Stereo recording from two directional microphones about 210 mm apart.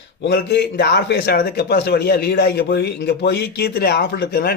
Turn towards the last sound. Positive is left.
turn(degrees=50)  # may be behind; listen again after turning